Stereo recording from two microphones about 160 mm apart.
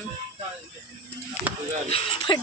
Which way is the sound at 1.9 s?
40° left (ahead or behind).